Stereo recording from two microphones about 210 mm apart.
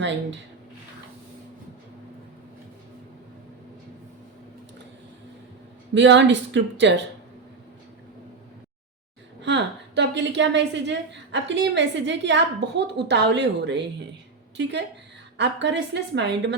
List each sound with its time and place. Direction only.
0.0 s a woman's voice: 60° right (ahead or behind)
5.9 s a woman's voice: 60° right (ahead or behind)
9.4 s a woman's voice: 55° right (ahead or behind)